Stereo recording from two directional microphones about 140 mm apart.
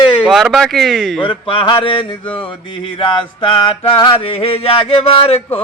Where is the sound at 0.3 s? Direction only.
Centre (ahead or behind).